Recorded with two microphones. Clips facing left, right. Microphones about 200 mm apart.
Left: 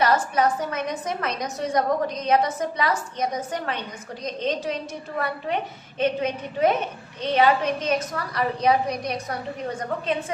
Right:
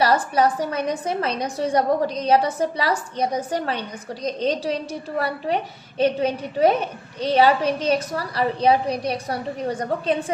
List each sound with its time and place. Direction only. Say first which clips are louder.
0.0 s a woman's voice: right 2 dB; 35° right (ahead or behind)